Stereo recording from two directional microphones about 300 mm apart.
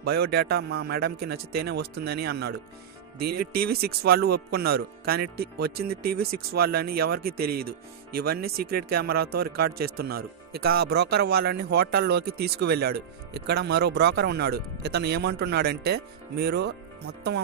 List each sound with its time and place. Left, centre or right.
0.0 s speech: right